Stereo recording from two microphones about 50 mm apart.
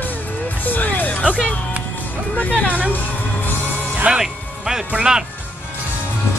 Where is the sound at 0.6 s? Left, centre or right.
Left.